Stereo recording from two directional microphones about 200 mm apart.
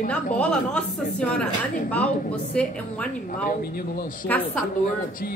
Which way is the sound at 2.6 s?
5° left (ahead or behind).